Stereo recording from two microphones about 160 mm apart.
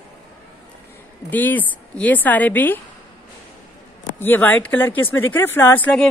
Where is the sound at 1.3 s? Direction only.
10° left (ahead or behind).